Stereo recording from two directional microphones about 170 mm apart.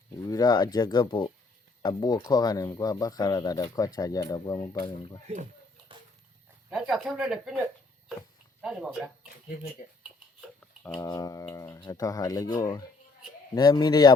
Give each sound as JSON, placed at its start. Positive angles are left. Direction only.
{"t": 0.3, "sound": "speech", "side_deg": 20}
{"t": 5.9, "sound": "a sound", "side_deg": -30}
{"t": 6.7, "sound": "speech", "side_deg": 0}
{"t": 8.6, "sound": "speech", "side_deg": -5}
{"t": 11.0, "sound": "speech", "side_deg": 20}